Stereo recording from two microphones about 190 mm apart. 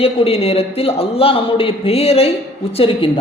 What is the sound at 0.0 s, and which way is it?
A man's voice, 30° left (ahead or behind).